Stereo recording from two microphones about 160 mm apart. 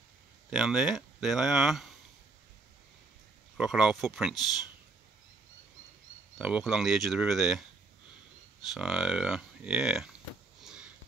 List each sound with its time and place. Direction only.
0.5 s speech: 5° right (ahead or behind)
3.5 s speech: 5° right (ahead or behind)
6.3 s speech: 5° right (ahead or behind)
8.7 s speech: 5° right (ahead or behind)
10.6 s sniff: 5° right (ahead or behind)